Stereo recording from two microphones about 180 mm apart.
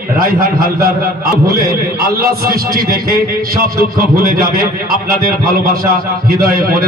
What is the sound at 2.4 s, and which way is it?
A man's voice, 55° right (ahead or behind).